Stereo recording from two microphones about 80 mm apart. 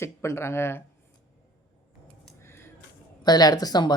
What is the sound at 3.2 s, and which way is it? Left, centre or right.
Speech, left.